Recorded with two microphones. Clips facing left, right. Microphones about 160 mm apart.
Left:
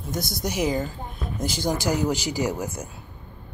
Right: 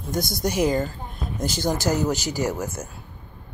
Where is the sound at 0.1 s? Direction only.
5° left (ahead or behind).